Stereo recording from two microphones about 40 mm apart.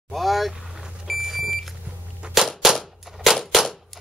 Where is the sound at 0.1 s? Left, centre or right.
Centre.